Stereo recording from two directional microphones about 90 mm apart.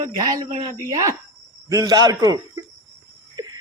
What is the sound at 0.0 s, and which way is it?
A man's voice, 45° right (ahead or behind).